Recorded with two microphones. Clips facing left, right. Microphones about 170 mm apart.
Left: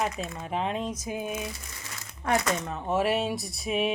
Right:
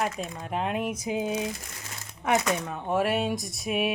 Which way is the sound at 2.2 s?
10° right (ahead or behind).